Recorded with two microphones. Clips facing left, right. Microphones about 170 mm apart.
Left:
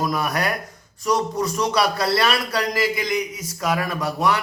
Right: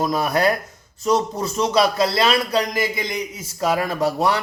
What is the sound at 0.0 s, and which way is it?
A man's voice, 25° right (ahead or behind).